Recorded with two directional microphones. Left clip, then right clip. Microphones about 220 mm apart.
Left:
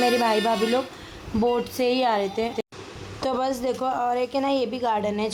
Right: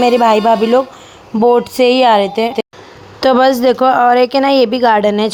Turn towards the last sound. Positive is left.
turn(degrees=-35)  # may be behind; listen again after turning